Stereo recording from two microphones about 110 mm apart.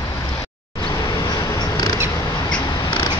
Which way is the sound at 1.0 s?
35° left (ahead or behind).